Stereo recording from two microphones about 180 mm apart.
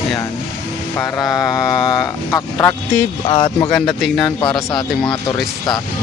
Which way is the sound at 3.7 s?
Centre (ahead or behind).